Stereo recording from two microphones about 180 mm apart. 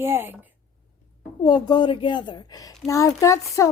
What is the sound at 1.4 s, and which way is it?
A woman's voice, 25° left (ahead or behind).